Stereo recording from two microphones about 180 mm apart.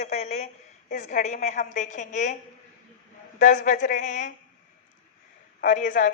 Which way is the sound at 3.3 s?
45° left (ahead or behind).